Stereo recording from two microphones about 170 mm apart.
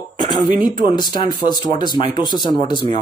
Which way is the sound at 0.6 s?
25° left (ahead or behind).